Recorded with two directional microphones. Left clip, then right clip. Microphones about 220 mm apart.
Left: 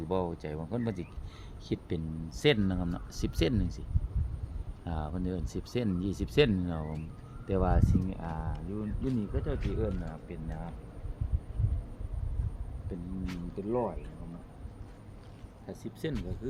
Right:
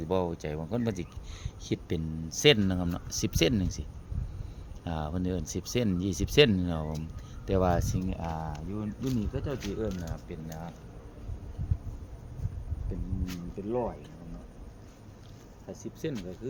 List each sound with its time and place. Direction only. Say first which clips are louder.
0.1 s speech: right 3 dB; 35° right (ahead or behind)
12.9 s speech: even; 5° right (ahead or behind)
15.8 s speech: right 1 dB; 10° left (ahead or behind)